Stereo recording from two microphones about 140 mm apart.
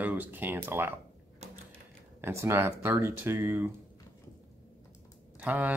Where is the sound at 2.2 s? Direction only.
20° right (ahead or behind).